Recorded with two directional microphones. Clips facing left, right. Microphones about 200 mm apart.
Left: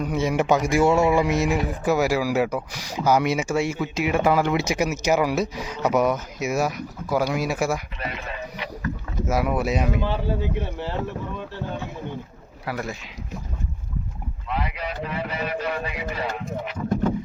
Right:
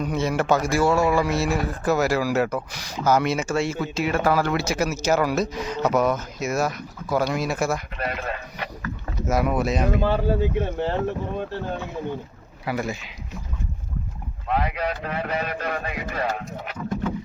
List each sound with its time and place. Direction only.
0.0 s a man's voice: 10° left (ahead or behind)
7.9 s speech: 50° right (ahead or behind)
9.2 s a man's voice: 5° left (ahead or behind)
10.0 s speech: 45° right (ahead or behind)
12.6 s speech: centre (ahead or behind)
14.4 s speech: 50° right (ahead or behind)